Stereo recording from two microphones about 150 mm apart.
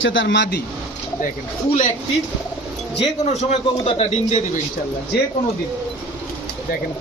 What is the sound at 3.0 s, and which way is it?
Speech, 50° left (ahead or behind).